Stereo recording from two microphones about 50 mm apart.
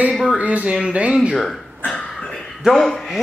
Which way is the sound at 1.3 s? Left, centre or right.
Centre.